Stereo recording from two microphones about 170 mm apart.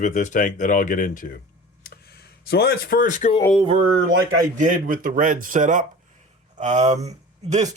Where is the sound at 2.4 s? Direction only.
70° left (ahead or behind); by 3.3 s 50° left (ahead or behind).